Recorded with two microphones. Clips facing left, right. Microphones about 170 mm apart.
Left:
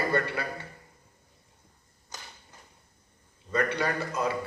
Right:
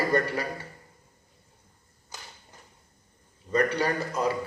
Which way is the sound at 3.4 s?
35° right (ahead or behind).